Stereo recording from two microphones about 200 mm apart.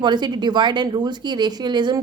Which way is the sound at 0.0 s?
20° right (ahead or behind).